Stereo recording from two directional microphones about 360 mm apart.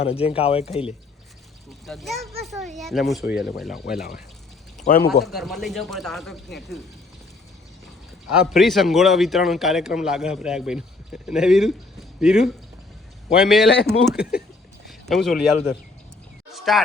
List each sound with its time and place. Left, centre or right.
0.0 s speech: centre
1.9 s a man's voice: centre
4.9 s speech: left
5.2 s a man's voice: centre
8.3 s a man's voice: centre
16.5 s a sound: centre